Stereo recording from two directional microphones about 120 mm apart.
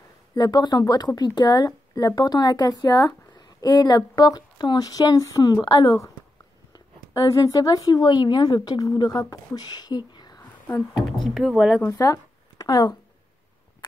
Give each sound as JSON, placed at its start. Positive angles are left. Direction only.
{"t": 0.3, "sound": "a woman's voice", "side_deg": 35}
{"t": 11.2, "sound": "speech", "side_deg": 0}
{"t": 11.9, "sound": "speech", "side_deg": 30}